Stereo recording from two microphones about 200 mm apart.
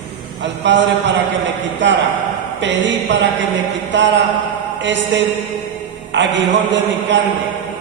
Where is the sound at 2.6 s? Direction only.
65° right (ahead or behind).